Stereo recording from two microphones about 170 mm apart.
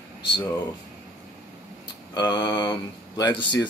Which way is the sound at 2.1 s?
25° left (ahead or behind).